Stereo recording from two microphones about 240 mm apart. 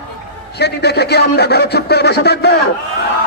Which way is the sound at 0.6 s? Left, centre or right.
Left.